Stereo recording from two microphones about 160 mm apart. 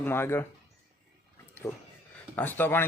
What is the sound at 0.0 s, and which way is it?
Speech, 15° left (ahead or behind).